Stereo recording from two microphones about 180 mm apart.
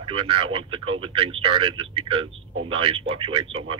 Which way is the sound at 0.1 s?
30° right (ahead or behind).